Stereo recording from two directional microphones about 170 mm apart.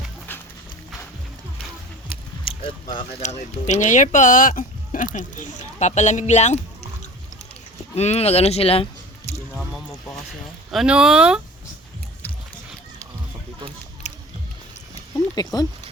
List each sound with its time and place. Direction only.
0.3 s horse: 10° left (ahead or behind)
2.0 s a sound: 30° left (ahead or behind)
3.2 s speech: 45° left (ahead or behind)
7.9 s speech: 40° left (ahead or behind)
9.6 s boat: centre (ahead or behind)
10.7 s speech: 5° right (ahead or behind)
14.0 s a sound: 40° left (ahead or behind)
15.4 s speech: 25° left (ahead or behind)